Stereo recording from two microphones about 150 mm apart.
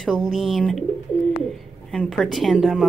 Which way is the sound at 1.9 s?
5° left (ahead or behind).